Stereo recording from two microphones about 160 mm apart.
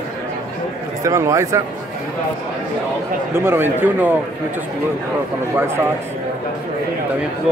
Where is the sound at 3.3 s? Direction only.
15° right (ahead or behind).